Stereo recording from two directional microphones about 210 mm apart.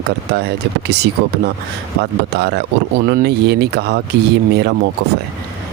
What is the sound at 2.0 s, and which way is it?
Speech, 55° right (ahead or behind).